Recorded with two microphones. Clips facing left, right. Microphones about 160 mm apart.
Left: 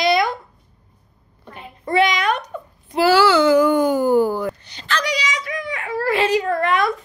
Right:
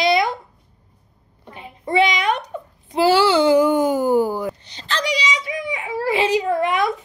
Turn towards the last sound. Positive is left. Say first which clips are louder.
# even
turn(degrees=-20)  # may be behind; listen again after turning